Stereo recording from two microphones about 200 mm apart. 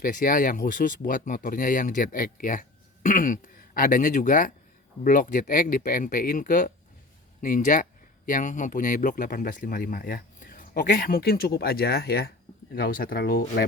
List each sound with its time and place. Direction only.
0.0 s speech: 45° left (ahead or behind)